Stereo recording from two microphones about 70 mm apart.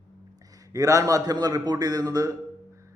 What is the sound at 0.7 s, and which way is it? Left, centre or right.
A man's voice, right.